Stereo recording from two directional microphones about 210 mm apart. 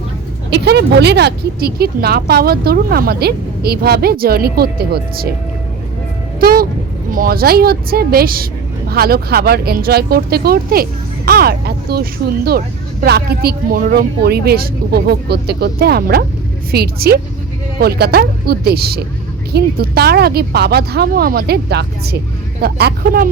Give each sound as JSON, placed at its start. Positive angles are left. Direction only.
{"t": 0.5, "sound": "a woman's voice", "side_deg": -50}
{"t": 6.4, "sound": "a woman's voice", "side_deg": -45}